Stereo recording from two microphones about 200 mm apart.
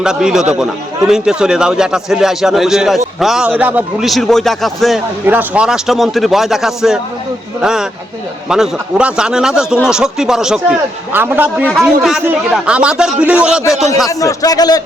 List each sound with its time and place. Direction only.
0.0 s a man's voice: 5° right (ahead or behind)
5.2 s a man's voice: 10° right (ahead or behind)
14.1 s a man's voice: 15° left (ahead or behind)